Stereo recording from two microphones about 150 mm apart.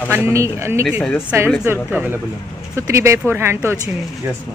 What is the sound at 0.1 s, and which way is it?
Speech, 15° right (ahead or behind).